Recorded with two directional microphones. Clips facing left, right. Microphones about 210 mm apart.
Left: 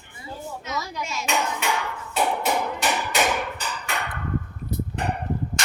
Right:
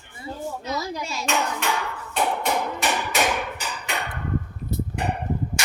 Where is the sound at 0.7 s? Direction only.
35° right (ahead or behind).